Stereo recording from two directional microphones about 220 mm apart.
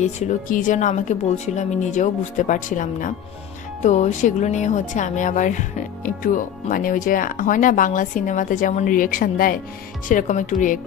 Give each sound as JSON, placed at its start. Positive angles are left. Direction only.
{"t": 0.0, "sound": "speech", "side_deg": 35}